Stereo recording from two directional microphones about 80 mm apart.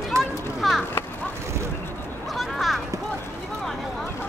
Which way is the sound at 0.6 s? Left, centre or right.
Centre.